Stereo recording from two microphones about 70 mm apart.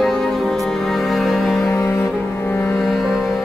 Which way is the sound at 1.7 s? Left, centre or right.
Left.